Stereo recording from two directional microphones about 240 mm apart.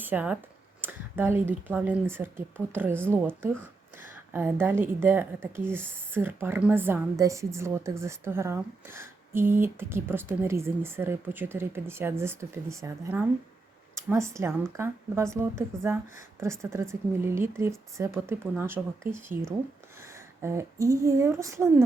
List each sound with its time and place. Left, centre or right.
0.0 s a woman's voice: centre